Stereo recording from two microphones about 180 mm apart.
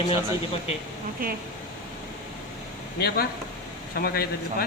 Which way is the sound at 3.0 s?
65° left (ahead or behind).